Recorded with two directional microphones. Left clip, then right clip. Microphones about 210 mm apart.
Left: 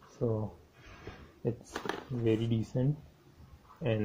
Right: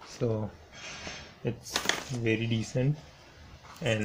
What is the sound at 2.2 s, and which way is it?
Speech, centre (ahead or behind).